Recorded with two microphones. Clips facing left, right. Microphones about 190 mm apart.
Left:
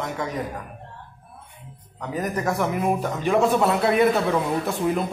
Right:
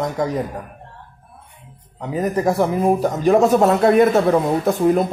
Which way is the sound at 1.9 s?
30° right (ahead or behind).